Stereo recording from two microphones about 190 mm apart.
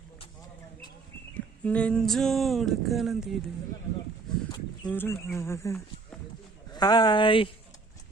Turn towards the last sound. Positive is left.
turn(degrees=25)  # may be behind; listen again after turning